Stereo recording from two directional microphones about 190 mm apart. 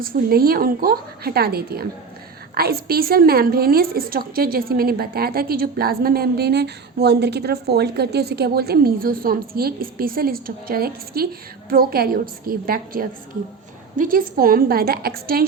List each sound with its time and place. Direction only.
0.0 s a woman's voice: 50° right (ahead or behind)